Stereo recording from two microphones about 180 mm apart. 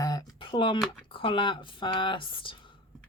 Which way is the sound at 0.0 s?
20° left (ahead or behind).